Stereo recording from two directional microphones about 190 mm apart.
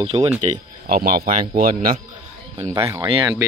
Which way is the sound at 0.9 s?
50° right (ahead or behind).